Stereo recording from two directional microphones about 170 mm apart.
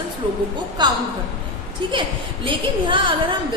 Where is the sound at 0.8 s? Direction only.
25° right (ahead or behind).